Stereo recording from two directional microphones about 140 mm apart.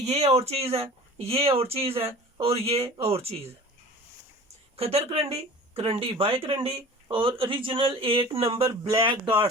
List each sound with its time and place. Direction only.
0.0 s speech: 50° right (ahead or behind)
4.8 s speech: 45° right (ahead or behind)
9.0 s speech: 30° right (ahead or behind)